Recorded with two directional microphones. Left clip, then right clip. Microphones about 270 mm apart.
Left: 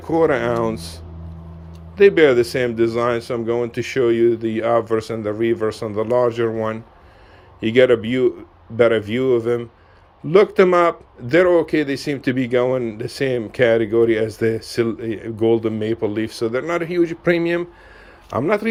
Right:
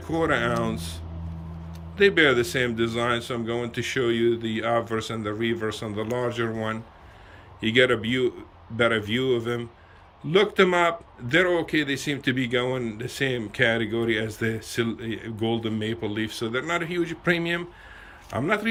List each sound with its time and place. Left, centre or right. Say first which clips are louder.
0.0 s speech: left 7 dB; centre
2.0 s speech: left 7 dB; centre